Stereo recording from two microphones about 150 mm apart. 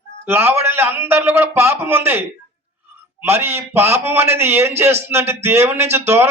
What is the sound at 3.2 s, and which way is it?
Speech, 15° right (ahead or behind).